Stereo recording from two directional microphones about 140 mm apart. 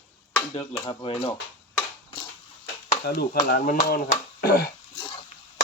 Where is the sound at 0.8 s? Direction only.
30° left (ahead or behind).